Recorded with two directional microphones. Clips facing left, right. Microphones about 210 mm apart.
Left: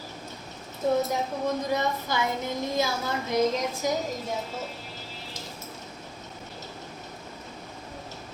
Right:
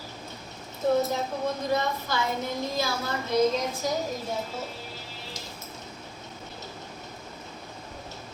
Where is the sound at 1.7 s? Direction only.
15° left (ahead or behind).